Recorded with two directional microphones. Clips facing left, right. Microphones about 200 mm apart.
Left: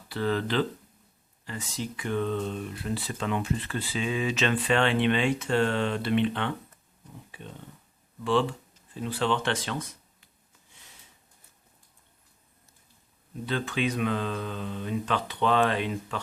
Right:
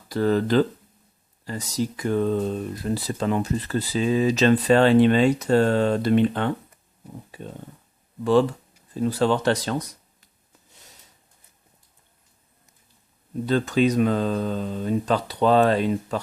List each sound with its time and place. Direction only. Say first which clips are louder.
0.1 s speech: right 7 dB; 40° right (ahead or behind)
10.7 s a sound: right 4 dB; 40° right (ahead or behind)
13.4 s speech: right 9 dB; 40° right (ahead or behind)